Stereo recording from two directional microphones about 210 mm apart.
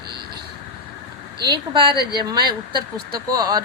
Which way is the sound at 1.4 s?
20° right (ahead or behind).